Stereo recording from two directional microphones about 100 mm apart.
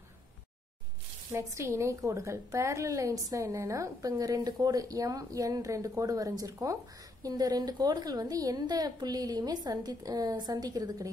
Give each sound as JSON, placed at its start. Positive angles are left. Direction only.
{"t": 1.3, "sound": "a woman's voice", "side_deg": -30}